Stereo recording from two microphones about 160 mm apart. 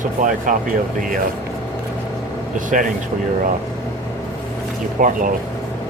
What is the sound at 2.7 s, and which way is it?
Speech, 50° right (ahead or behind).